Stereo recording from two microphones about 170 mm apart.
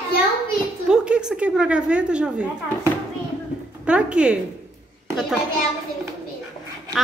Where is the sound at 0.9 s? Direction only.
5° right (ahead or behind).